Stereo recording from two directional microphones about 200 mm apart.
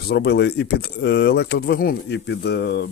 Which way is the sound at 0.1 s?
55° left (ahead or behind).